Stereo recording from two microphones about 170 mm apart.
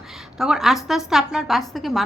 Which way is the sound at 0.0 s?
Centre (ahead or behind).